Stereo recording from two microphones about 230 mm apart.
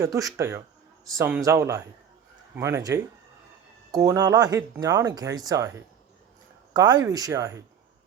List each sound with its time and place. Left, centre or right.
0.0 s speech: centre